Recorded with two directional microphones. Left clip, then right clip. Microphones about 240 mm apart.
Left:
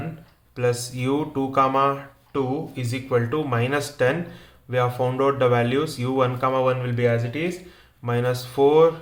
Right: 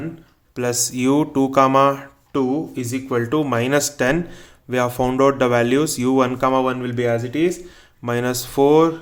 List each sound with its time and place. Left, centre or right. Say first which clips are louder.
0.5 s speech: right 2 dB; right